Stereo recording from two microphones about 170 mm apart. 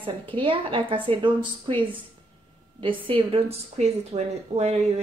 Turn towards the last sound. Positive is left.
turn(degrees=-40)  # may be behind; listen again after turning